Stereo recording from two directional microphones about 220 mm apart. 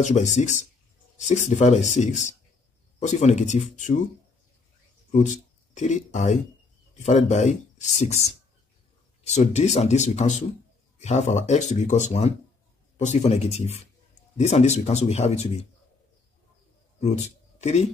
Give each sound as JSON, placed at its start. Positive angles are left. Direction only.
{"t": 0.0, "sound": "speech", "side_deg": 35}
{"t": 5.1, "sound": "speech", "side_deg": 35}
{"t": 17.0, "sound": "speech", "side_deg": 30}